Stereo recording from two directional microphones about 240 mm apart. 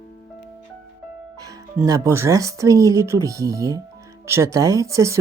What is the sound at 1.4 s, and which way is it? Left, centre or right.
Speech, centre.